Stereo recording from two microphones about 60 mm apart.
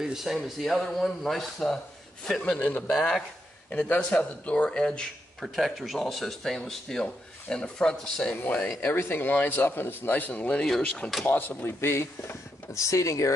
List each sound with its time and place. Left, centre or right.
0.0 s a man's voice: centre
3.7 s a man's voice: left
5.4 s speech: centre
8.6 s speech: left; by 10.7 s centre
11.2 s speech: left